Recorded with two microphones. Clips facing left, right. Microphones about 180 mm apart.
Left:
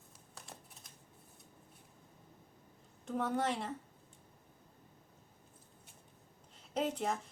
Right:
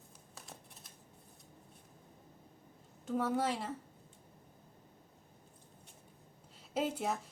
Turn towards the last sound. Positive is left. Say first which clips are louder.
# even
turn(degrees=-5)  # may be behind; listen again after turning